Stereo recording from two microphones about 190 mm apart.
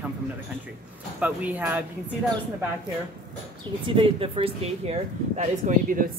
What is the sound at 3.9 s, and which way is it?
Speech, 30° right (ahead or behind).